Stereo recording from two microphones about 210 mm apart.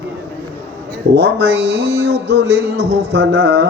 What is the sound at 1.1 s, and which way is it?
Mantra, 50° right (ahead or behind).